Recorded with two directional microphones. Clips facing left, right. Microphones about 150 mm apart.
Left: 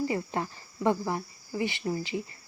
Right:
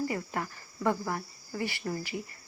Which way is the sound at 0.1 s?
25° left (ahead or behind).